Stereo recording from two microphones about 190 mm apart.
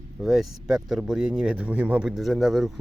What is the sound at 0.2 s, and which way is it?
Speech, centre (ahead or behind).